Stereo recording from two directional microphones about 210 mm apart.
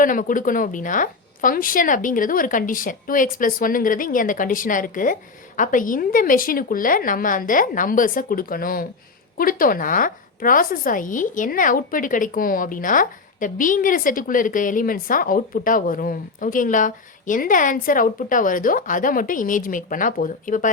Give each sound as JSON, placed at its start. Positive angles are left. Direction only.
{"t": 0.0, "sound": "a woman's voice", "side_deg": 40}